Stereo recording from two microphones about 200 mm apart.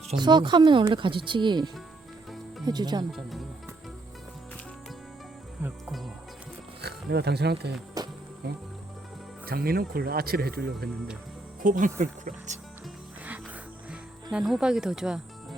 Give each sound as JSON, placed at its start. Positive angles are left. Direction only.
{"t": 0.1, "sound": "speech", "side_deg": -20}
{"t": 3.1, "sound": "speech", "side_deg": 0}
{"t": 5.6, "sound": "music", "side_deg": 0}
{"t": 6.8, "sound": "speech", "side_deg": -55}
{"t": 8.0, "sound": "music", "side_deg": -20}
{"t": 8.4, "sound": "speech", "side_deg": -55}
{"t": 13.9, "sound": "speech", "side_deg": -5}